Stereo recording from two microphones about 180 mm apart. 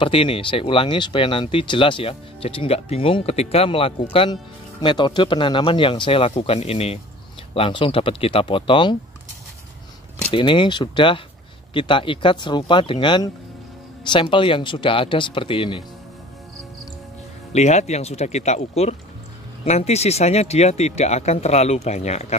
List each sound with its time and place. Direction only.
0.0 s speech: 30° left (ahead or behind)
10.3 s speech: 25° left (ahead or behind)
17.5 s speech: 40° left (ahead or behind)